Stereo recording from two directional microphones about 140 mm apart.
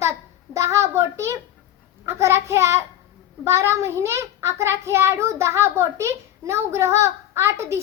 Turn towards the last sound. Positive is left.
turn(degrees=-20)  # may be behind; listen again after turning